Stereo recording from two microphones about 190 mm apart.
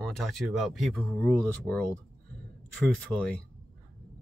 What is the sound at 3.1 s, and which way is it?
Speech, 5° left (ahead or behind).